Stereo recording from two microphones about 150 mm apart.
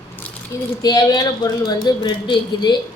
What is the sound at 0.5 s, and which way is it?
A woman's voice, 20° left (ahead or behind).